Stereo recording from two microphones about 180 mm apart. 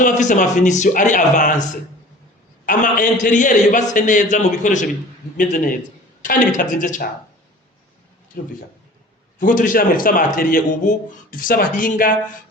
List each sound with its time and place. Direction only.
0.0 s a man's voice: 45° left (ahead or behind)
2.6 s a man's voice: 45° left (ahead or behind)
6.2 s a man's voice: 50° left (ahead or behind)
9.4 s a man's voice: 45° left (ahead or behind)